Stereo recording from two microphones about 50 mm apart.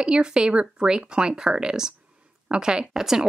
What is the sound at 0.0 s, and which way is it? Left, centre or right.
Speech, centre.